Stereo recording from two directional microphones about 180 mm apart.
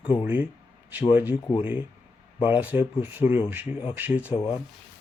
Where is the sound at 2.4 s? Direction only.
10° right (ahead or behind).